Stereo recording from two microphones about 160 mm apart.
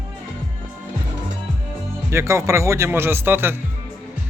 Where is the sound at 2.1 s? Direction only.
15° right (ahead or behind).